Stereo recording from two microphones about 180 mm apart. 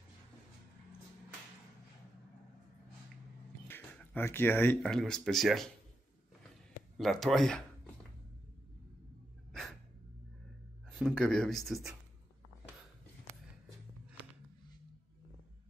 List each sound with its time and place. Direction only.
3.6 s speech: 10° left (ahead or behind)
7.0 s speech: centre (ahead or behind)
9.5 s dog: centre (ahead or behind)
10.9 s speech: 5° left (ahead or behind)